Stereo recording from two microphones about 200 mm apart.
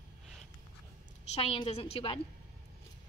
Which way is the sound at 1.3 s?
25° left (ahead or behind).